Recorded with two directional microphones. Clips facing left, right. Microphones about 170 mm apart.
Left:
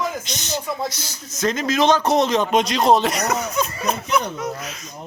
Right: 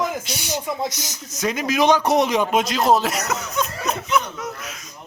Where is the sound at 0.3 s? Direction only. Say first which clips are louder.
Even; 10° right (ahead or behind).